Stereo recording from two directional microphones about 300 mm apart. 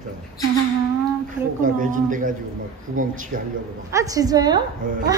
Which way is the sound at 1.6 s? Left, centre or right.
Right.